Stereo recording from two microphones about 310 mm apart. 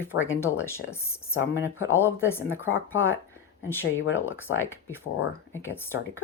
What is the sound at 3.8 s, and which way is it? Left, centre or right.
Speech, left.